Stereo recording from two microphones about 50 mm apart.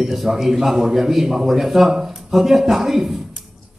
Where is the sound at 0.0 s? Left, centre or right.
Centre.